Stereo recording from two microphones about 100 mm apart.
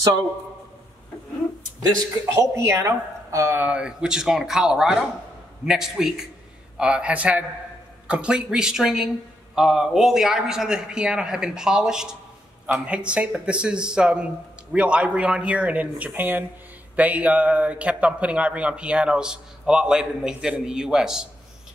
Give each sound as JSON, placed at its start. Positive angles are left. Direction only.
{"t": 1.8, "sound": "speech", "side_deg": -30}
{"t": 3.5, "sound": "a man's voice", "side_deg": -10}